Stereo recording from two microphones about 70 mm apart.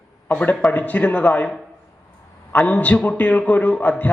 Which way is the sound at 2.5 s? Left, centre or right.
Centre.